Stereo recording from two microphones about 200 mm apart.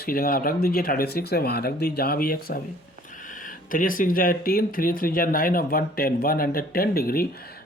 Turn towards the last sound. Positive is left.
turn(degrees=50)  # may be behind; listen again after turning